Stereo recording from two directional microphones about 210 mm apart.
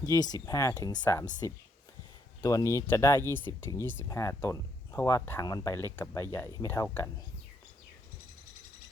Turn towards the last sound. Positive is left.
turn(degrees=10)  # may be behind; listen again after turning